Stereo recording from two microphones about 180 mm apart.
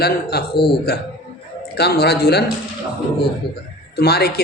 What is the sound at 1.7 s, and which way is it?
Speech, 60° left (ahead or behind).